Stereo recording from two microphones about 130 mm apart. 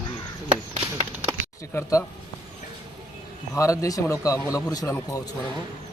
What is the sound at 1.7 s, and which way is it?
Speech, 25° left (ahead or behind).